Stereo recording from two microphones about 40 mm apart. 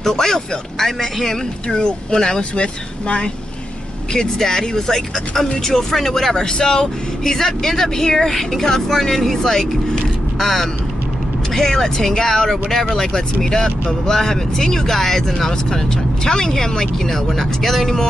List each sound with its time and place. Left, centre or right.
0.0 s speech: centre
4.1 s speech: centre
6.3 s speech: centre